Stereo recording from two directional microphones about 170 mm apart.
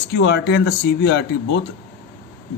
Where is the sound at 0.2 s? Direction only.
90° left.